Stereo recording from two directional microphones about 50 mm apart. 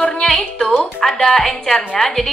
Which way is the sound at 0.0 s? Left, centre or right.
Centre.